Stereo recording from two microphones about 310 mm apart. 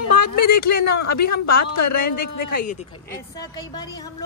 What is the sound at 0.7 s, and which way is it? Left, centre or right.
A woman's voice, left.